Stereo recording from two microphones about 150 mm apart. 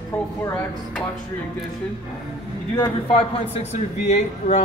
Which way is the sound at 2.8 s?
40° left (ahead or behind).